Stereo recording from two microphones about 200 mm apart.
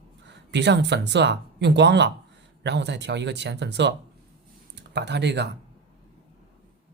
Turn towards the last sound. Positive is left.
turn(degrees=-60)  # may be behind; listen again after turning